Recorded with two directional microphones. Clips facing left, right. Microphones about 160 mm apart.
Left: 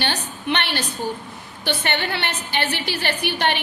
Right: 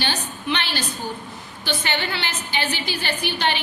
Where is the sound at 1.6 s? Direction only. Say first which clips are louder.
Left 2 dB; 60° left (ahead or behind).